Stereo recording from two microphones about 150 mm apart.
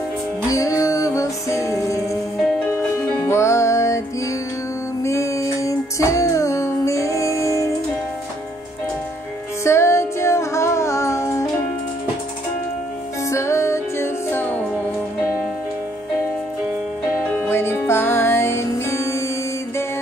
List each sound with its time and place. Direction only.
0.5 s music: 20° left (ahead or behind)
3.2 s music: 20° left (ahead or behind)
5.0 s music: 20° left (ahead or behind)
9.7 s music: 20° left (ahead or behind)
13.3 s music: 20° left (ahead or behind)
17.5 s music: 15° left (ahead or behind)